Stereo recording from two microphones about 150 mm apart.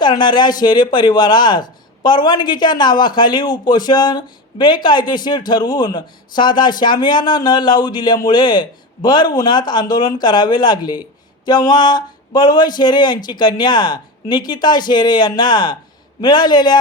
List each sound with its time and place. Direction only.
0.0 s speech: 30° left (ahead or behind)